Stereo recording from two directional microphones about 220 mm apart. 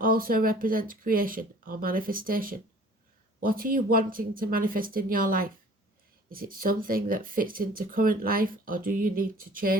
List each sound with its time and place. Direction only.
0.0 s speech: 40° right (ahead or behind)